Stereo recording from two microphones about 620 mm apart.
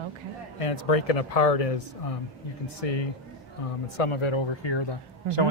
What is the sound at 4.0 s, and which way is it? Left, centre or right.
Speech, left.